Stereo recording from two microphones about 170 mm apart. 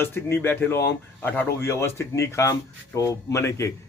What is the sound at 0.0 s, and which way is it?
Speech, 15° left (ahead or behind).